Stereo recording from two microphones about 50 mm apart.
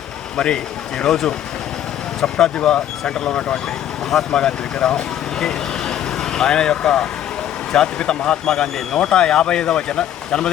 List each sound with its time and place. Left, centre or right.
0.3 s speech: centre